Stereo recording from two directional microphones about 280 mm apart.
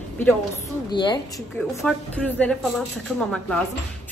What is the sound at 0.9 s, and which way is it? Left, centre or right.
Speech, centre.